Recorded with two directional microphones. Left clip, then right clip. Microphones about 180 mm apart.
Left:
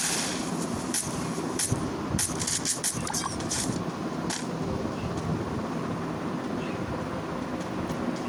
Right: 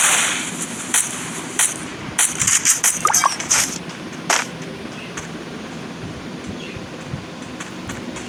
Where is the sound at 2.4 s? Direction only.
60° right (ahead or behind).